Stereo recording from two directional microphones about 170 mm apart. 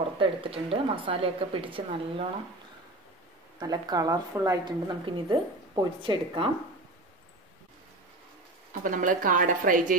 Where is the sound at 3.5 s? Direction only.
25° right (ahead or behind).